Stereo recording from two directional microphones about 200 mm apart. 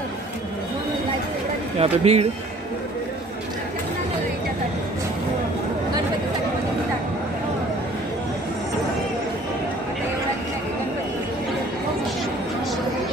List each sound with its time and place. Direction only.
1.8 s speech: 30° right (ahead or behind)